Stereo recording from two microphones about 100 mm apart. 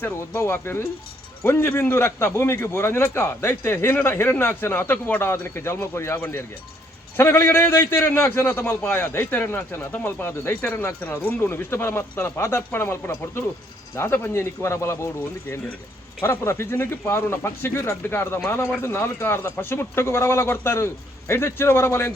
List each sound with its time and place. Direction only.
0.0 s a man's voice: 25° left (ahead or behind)